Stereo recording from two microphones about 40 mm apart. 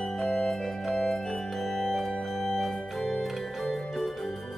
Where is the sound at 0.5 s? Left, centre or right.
Centre.